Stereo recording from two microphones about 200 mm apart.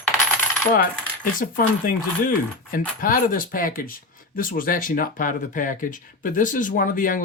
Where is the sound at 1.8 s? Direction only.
45° left (ahead or behind).